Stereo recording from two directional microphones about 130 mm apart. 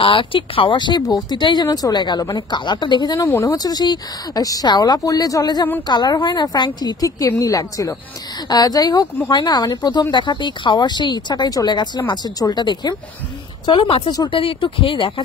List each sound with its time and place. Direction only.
0.0 s speech: 40° left (ahead or behind)
3.3 s speech: 25° left (ahead or behind)
13.7 s speech: 40° left (ahead or behind)